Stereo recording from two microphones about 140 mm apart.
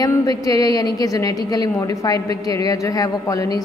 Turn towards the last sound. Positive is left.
turn(degrees=25)  # may be behind; listen again after turning